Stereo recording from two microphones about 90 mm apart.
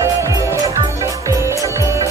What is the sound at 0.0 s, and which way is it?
Music, 30° right (ahead or behind).